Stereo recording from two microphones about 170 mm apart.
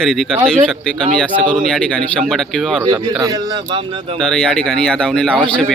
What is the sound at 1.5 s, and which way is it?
A man's voice, 5° left (ahead or behind).